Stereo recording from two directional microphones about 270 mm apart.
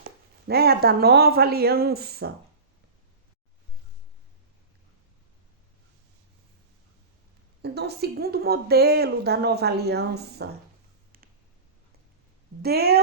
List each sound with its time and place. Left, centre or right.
0.0 s speech: right
7.6 s speech: right
12.6 s speech: right